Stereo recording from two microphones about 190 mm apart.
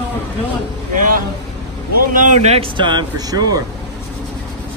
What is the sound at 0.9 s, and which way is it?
A man's voice, 45° right (ahead or behind).